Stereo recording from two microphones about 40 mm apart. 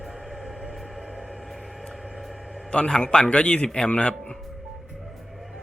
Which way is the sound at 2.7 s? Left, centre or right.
Left.